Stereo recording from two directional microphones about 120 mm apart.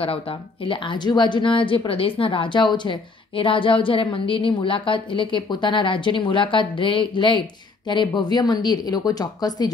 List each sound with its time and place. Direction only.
0.0 s speech: 50° left (ahead or behind); by 9.7 s 35° left (ahead or behind)